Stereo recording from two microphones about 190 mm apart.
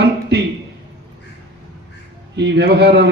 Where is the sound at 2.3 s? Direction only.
60° right (ahead or behind).